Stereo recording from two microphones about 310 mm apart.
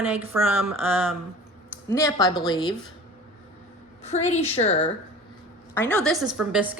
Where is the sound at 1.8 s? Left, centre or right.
Centre.